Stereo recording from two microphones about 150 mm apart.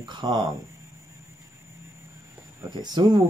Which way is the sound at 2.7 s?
25° right (ahead or behind).